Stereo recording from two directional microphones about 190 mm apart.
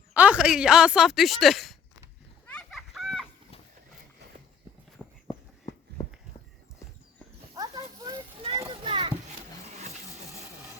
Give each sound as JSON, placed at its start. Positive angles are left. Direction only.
{"t": 0.1, "sound": "speech", "side_deg": -5}
{"t": 2.5, "sound": "children playing", "side_deg": 5}
{"t": 5.0, "sound": "walk", "side_deg": 10}
{"t": 7.5, "sound": "a sound", "side_deg": -20}